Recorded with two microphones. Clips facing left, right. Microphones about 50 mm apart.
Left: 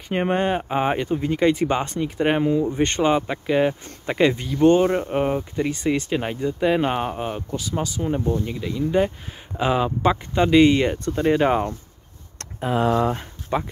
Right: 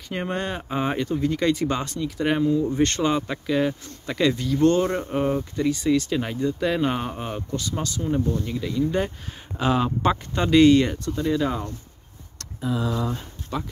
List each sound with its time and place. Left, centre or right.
0.1 s speech: left; by 8.0 s centre
8.0 s speech: left
11.1 s speech: left
13.5 s speech: left